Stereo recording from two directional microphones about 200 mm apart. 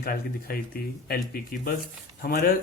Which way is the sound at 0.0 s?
50° left (ahead or behind).